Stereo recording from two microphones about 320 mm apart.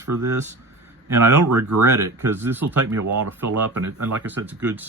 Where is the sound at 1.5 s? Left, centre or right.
Right.